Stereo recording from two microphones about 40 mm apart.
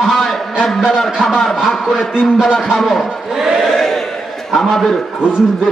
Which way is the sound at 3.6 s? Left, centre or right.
Centre.